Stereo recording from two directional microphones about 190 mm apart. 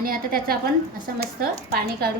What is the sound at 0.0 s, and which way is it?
Speech, 50° right (ahead or behind).